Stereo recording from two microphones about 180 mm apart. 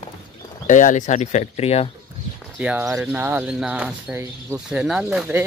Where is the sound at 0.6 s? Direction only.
45° left (ahead or behind).